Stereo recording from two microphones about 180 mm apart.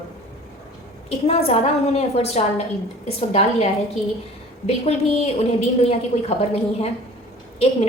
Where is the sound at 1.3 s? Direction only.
35° left (ahead or behind).